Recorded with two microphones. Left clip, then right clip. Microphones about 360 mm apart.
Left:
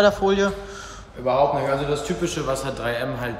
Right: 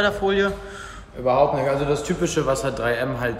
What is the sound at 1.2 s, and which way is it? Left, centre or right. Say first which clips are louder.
A man's voice: right 1 dB; centre.